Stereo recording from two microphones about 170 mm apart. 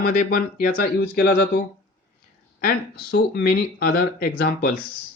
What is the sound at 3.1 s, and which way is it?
Speech, 90° left.